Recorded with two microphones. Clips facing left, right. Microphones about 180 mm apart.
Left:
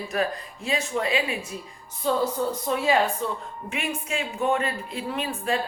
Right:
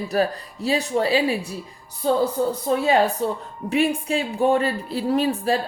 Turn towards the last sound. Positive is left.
turn(degrees=-35)  # may be behind; listen again after turning